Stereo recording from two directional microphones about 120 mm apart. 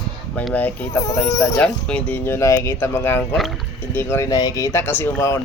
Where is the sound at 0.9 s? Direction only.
25° left (ahead or behind).